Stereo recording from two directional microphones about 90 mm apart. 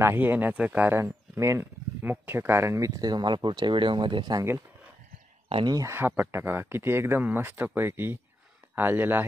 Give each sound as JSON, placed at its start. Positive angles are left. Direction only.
{"t": 0.0, "sound": "speech", "side_deg": -25}
{"t": 5.7, "sound": "speech", "side_deg": -40}
{"t": 5.9, "sound": "speech", "side_deg": -25}